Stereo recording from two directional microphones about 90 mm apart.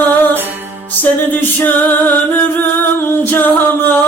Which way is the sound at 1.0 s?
20° left (ahead or behind).